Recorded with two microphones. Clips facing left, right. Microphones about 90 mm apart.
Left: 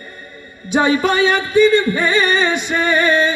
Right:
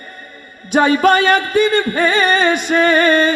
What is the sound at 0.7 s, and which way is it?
Music, 55° right (ahead or behind).